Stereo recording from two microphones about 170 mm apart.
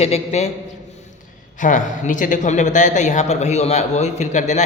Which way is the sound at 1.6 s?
50° left (ahead or behind).